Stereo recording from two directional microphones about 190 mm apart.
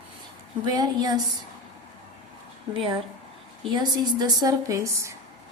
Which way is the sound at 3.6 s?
20° right (ahead or behind).